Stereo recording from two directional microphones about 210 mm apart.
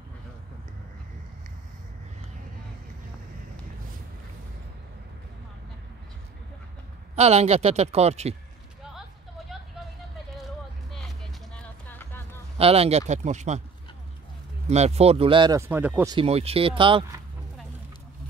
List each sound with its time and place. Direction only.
7.2 s speech: 30° right (ahead or behind)
10.9 s music: centre (ahead or behind)
12.5 s speech: 30° right (ahead or behind)
14.7 s speech: 30° right (ahead or behind)